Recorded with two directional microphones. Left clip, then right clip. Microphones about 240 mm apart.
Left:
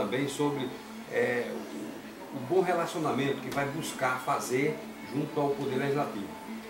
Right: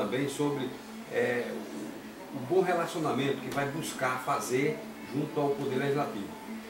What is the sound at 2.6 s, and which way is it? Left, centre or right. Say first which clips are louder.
Speech: even; centre.